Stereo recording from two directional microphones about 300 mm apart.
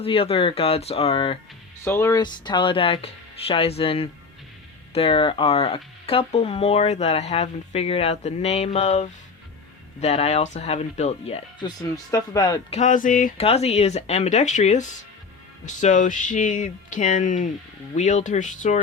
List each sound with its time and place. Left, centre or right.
0.0 s speech: centre
12.8 s speech: left